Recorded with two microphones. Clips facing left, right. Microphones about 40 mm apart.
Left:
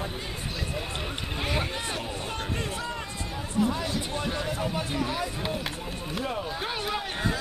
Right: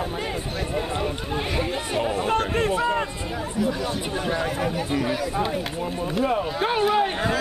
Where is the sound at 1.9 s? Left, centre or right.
Right.